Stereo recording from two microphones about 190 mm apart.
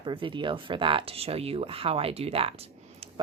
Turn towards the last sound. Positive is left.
turn(degrees=-30)  # may be behind; listen again after turning